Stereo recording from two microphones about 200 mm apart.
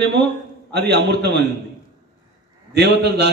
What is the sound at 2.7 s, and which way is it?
Speech, 55° right (ahead or behind).